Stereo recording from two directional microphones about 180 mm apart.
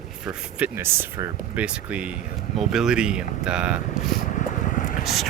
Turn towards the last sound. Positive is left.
turn(degrees=0)  # may be behind; listen again after turning